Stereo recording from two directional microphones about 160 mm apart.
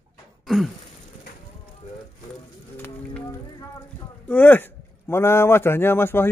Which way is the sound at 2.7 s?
15° left (ahead or behind).